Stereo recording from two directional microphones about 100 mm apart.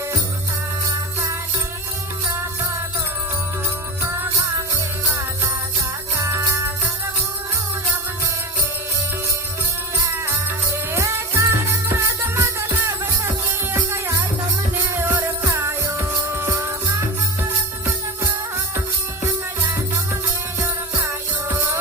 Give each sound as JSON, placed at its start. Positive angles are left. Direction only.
{"t": 6.1, "sound": "jingle bell", "side_deg": -30}
{"t": 10.9, "sound": "music", "side_deg": -30}
{"t": 15.1, "sound": "music", "side_deg": -30}